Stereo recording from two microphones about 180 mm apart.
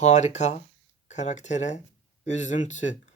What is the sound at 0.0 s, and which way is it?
Speech, 40° left (ahead or behind).